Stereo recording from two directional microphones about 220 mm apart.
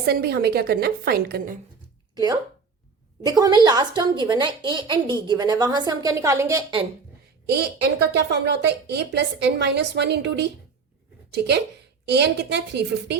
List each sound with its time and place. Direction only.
0.0 s a woman's voice: 45° right (ahead or behind)
2.1 s a woman's voice: 15° right (ahead or behind)
7.4 s a woman's voice: 50° right (ahead or behind)